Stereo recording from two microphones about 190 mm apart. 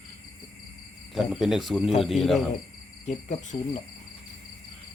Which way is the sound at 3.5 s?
20° left (ahead or behind).